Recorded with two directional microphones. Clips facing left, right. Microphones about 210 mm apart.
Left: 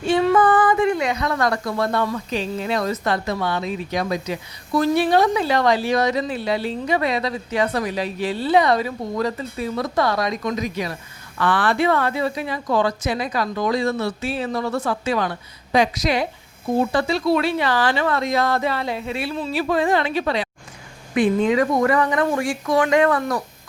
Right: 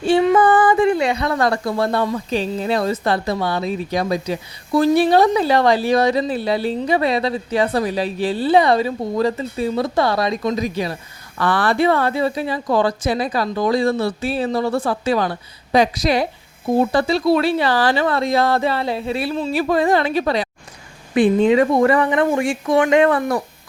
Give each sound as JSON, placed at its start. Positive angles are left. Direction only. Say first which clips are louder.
{"t": 0.0, "sound": "female singing", "louder": "right 3 dB", "side_deg": -30}
{"t": 0.3, "sound": "speech", "louder": "right 2 dB", "side_deg": -25}
{"t": 21.2, "sound": "speech", "louder": "right 4 dB", "side_deg": -25}